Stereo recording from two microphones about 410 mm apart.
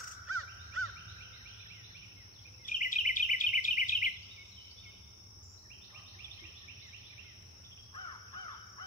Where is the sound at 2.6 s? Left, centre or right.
Centre.